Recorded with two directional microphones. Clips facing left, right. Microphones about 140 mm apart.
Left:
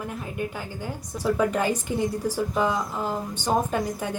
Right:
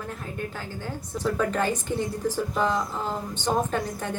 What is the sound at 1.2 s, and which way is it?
A woman's voice, 10° left (ahead or behind).